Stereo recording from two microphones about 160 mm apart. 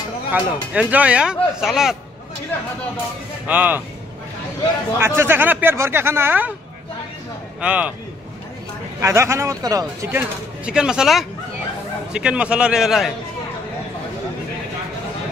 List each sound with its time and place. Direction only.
0.3 s speech: 10° right (ahead or behind)
3.4 s speech: 10° right (ahead or behind)
4.9 s speech: 15° right (ahead or behind)
7.6 s speech: 10° right (ahead or behind)
9.0 s speech: 15° right (ahead or behind)
10.1 s speech: 5° right (ahead or behind)